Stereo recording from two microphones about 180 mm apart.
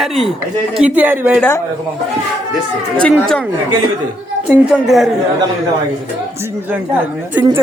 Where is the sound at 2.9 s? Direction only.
5° left (ahead or behind).